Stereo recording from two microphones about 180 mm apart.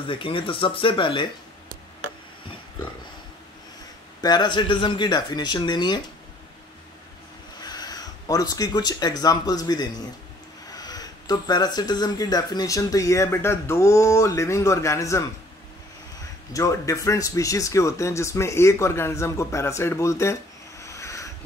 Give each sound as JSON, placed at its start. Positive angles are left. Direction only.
{"t": 0.0, "sound": "speech", "side_deg": 30}
{"t": 4.2, "sound": "speech", "side_deg": 25}
{"t": 7.6, "sound": "speech", "side_deg": 20}
{"t": 16.5, "sound": "speech", "side_deg": 20}
{"t": 20.8, "sound": "a sound", "side_deg": 15}